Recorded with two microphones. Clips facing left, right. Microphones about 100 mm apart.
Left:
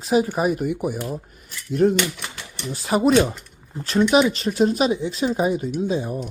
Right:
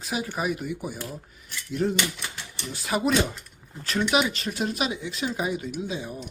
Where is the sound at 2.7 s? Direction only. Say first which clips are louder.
Left 7 dB; 35° left (ahead or behind).